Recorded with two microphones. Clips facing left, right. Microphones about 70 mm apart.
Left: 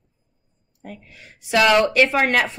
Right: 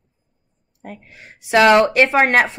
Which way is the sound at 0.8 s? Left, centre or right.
Right.